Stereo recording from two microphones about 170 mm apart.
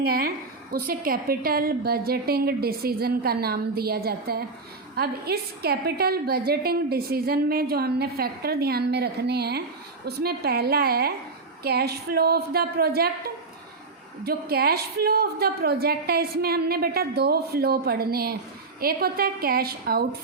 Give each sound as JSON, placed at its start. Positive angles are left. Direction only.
{"t": 0.0, "sound": "a woman's voice", "side_deg": -60}